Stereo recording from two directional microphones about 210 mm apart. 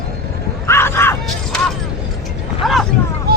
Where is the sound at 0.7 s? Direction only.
10° left (ahead or behind).